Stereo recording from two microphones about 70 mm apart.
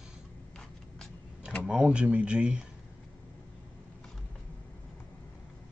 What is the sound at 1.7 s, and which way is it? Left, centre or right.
Speech, centre.